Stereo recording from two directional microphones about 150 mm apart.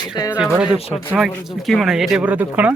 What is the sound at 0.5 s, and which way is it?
Speech, 5° right (ahead or behind).